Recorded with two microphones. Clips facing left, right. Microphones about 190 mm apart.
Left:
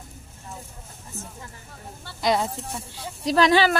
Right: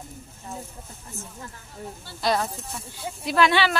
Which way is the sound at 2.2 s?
20° left (ahead or behind).